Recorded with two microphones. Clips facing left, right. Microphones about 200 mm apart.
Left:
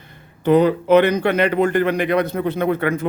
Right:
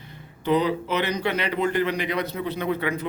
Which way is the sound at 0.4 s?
50° left (ahead or behind).